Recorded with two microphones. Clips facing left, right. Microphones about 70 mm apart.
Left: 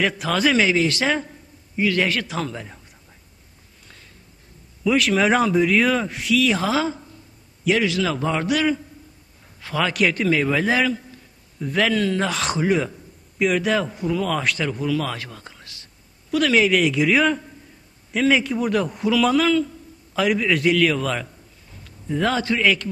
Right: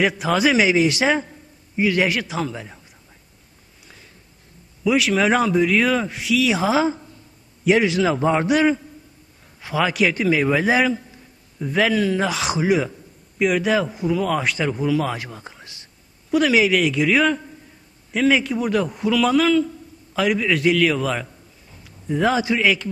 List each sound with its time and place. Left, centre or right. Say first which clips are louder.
0.2 s a man's voice: right 2 dB; centre
2.2 s a man's voice: right 1 dB; centre
4.8 s a man's voice: even; centre; by 8.4 s right
9.6 s a man's voice: right 1 dB; centre
11.6 s a man's voice: right 1 dB; centre
14.8 s speech: right 3 dB; centre
16.3 s a man's voice: right 1 dB; centre